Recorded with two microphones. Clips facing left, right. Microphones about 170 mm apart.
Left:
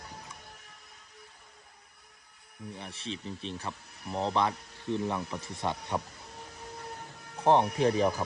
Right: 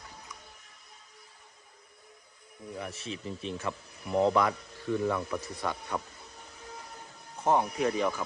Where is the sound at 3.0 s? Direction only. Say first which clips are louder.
Right 1 dB; 30° left (ahead or behind).